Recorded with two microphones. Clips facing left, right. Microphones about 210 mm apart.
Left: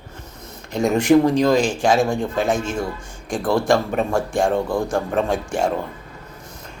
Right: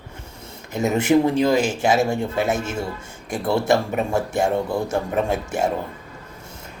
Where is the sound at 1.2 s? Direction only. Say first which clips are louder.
Left 2 dB; 5° right (ahead or behind).